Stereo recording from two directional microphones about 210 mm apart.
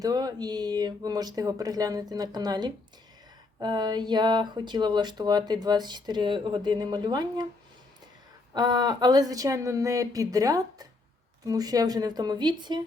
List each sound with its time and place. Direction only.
0.0 s speech: 20° right (ahead or behind)
8.5 s speech: 20° right (ahead or behind)